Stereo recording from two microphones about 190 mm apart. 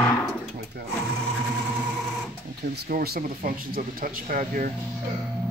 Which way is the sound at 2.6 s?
55° right (ahead or behind).